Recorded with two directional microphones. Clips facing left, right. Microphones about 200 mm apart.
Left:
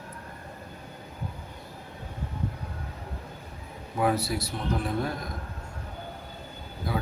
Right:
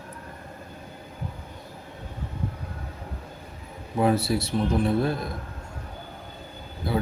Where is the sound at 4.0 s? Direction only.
25° right (ahead or behind).